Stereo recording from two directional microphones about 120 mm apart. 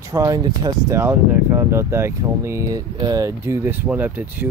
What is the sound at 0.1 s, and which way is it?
Speech, 30° right (ahead or behind).